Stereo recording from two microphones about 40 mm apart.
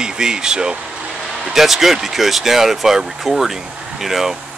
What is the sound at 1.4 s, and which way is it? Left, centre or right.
Speech, centre.